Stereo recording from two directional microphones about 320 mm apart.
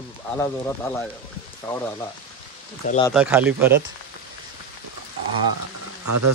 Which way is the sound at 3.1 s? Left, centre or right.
Centre.